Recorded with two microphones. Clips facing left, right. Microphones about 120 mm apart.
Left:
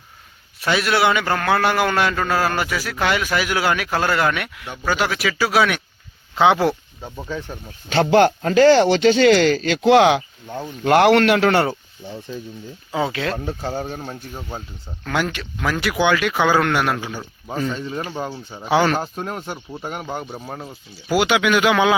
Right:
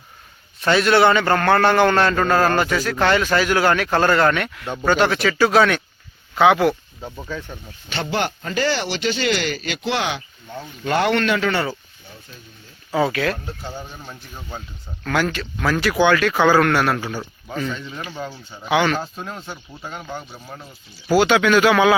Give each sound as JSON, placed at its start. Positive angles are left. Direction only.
{"t": 0.6, "sound": "a man's voice", "side_deg": 5}
{"t": 4.6, "sound": "speech", "side_deg": -25}
{"t": 4.9, "sound": "a man's voice", "side_deg": 5}
{"t": 6.3, "sound": "speech", "side_deg": 25}
{"t": 7.9, "sound": "speech", "side_deg": 90}
{"t": 9.1, "sound": "a man's voice", "side_deg": 90}
{"t": 12.9, "sound": "speech", "side_deg": 15}
{"t": 13.5, "sound": "speech", "side_deg": 60}
{"t": 15.1, "sound": "a man's voice", "side_deg": 15}
{"t": 17.5, "sound": "speech", "side_deg": 30}
{"t": 19.1, "sound": "speech", "side_deg": 50}
{"t": 21.1, "sound": "a man's voice", "side_deg": 15}